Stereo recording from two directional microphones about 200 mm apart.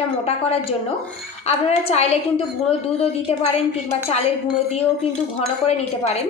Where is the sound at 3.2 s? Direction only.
30° left (ahead or behind).